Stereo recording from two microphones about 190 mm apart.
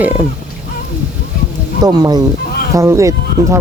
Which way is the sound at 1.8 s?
20° right (ahead or behind).